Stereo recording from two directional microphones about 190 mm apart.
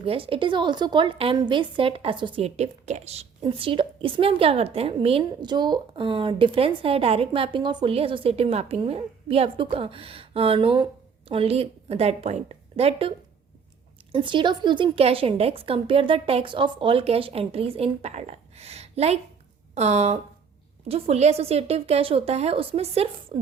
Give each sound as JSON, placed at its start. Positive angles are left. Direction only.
{"t": 0.0, "sound": "a woman's voice", "side_deg": -30}